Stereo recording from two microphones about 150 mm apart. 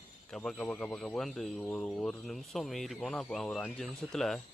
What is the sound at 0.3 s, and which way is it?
Speech, 5° left (ahead or behind).